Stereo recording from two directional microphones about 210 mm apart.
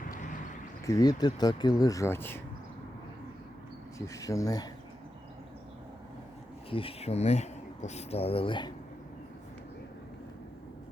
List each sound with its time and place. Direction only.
0.1 s a sound: 35° left (ahead or behind)
0.9 s speech: 15° left (ahead or behind)
3.9 s speech: 15° left (ahead or behind)
6.7 s speech: 25° left (ahead or behind)